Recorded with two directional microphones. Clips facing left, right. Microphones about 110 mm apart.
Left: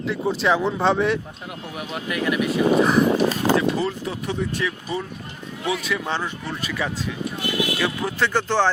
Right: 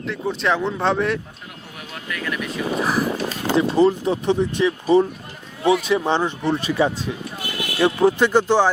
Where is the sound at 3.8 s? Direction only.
25° right (ahead or behind).